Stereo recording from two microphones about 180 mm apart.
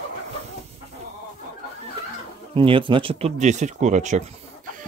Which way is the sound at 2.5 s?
30° right (ahead or behind).